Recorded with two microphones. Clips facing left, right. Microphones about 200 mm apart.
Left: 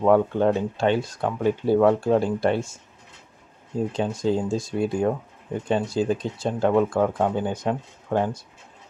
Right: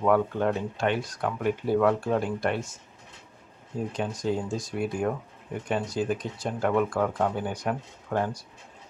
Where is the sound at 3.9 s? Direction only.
25° left (ahead or behind).